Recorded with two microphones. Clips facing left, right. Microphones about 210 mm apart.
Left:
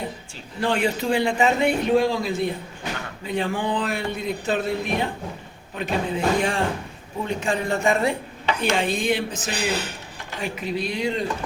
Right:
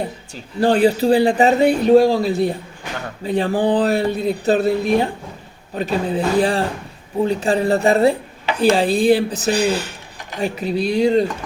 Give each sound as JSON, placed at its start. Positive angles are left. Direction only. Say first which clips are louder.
{"t": 0.6, "sound": "a man's voice", "louder": "right 8 dB", "side_deg": -35}